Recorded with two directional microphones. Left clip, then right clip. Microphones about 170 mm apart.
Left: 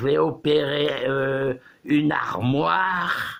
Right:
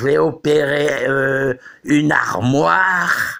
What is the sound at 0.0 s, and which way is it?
Speech, 40° right (ahead or behind).